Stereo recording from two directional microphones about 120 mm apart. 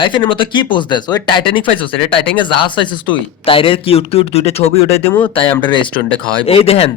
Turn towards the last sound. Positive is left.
turn(degrees=55)  # may be behind; listen again after turning